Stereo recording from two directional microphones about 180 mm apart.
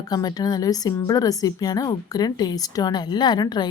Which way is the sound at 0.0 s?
20° left (ahead or behind).